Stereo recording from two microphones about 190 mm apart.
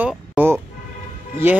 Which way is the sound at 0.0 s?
5° right (ahead or behind).